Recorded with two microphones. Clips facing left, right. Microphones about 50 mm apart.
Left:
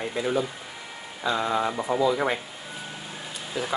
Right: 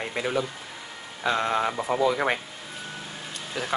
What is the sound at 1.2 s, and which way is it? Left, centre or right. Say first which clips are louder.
Speech: right 1 dB; right.